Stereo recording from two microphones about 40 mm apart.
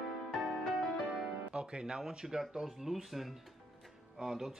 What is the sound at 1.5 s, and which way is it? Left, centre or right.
Speech, right.